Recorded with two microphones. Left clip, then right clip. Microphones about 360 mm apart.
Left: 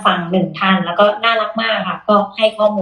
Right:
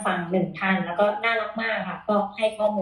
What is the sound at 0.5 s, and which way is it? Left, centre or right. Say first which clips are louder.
Speech: left 11 dB; left.